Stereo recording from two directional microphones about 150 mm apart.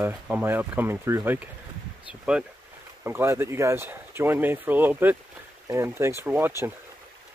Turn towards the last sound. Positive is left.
turn(degrees=-15)  # may be behind; listen again after turning